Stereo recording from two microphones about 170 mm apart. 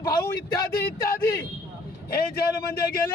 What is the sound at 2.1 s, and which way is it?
Speech, 65° left (ahead or behind).